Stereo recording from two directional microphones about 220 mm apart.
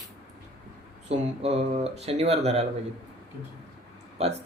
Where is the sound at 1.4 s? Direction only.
30° right (ahead or behind).